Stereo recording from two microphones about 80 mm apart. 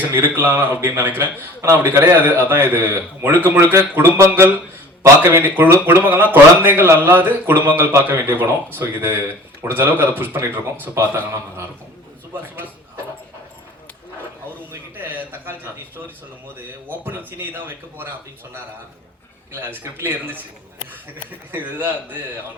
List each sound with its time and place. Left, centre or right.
0.2 s a man's voice: right
3.9 s speech: right
10.9 s a man's voice: right
14.7 s speech: right
16.9 s speech: right
19.6 s speech: right
21.5 s speech: right